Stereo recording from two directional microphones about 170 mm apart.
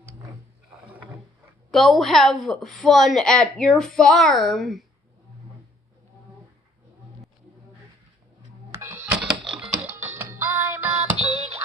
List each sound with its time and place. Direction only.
0.7 s rowboat: 10° right (ahead or behind)
1.7 s a woman's voice: centre (ahead or behind)
8.7 s music: 10° right (ahead or behind)
11.1 s music: 35° right (ahead or behind)